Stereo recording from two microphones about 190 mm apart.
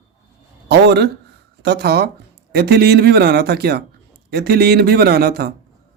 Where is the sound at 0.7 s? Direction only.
60° right (ahead or behind).